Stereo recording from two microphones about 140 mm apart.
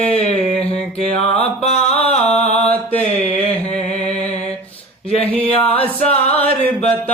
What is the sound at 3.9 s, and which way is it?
Music, 10° left (ahead or behind).